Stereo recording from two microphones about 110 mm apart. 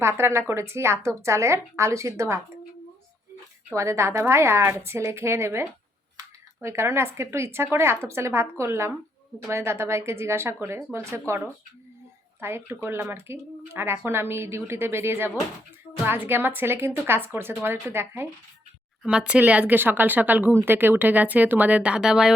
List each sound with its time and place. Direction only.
0.0 s speech: 25° right (ahead or behind)
3.8 s speech: 25° right (ahead or behind)
6.2 s a sound: 35° right (ahead or behind)
6.6 s speech: 25° right (ahead or behind)
19.0 s speech: 10° right (ahead or behind)